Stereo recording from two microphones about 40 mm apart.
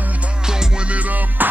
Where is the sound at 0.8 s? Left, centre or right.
Right.